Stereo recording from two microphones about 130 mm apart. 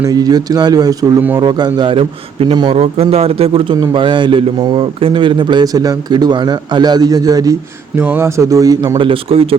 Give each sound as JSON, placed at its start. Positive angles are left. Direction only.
{"t": 0.0, "sound": "speech", "side_deg": -30}
{"t": 7.9, "sound": "speech", "side_deg": -15}